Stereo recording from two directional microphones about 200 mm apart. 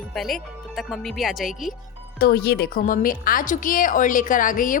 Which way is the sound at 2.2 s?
50° left (ahead or behind).